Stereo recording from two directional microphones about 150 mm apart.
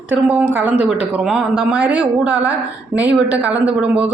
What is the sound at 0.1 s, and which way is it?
A woman's voice, 10° right (ahead or behind).